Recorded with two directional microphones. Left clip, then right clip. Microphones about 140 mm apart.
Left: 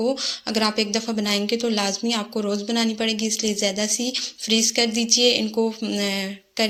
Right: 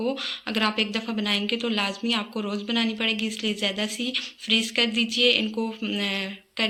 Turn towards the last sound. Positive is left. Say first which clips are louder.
# left 3 dB
turn(degrees=50)  # may be behind; listen again after turning